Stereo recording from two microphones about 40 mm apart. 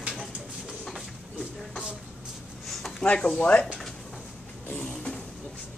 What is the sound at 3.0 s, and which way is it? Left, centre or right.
Speech, left.